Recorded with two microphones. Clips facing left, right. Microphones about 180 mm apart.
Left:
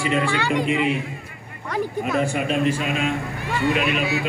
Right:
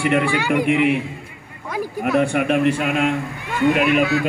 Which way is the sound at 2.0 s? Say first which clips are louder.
Right 6 dB; 65° right (ahead or behind).